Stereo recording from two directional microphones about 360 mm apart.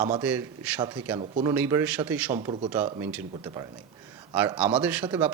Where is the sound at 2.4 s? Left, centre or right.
Centre.